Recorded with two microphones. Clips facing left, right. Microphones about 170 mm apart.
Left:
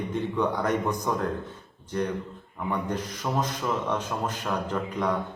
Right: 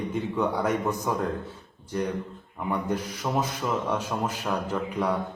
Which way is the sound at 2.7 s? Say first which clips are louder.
Right 1 dB; 10° right (ahead or behind).